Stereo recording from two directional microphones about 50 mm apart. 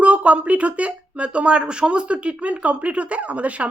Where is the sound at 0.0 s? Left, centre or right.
Right.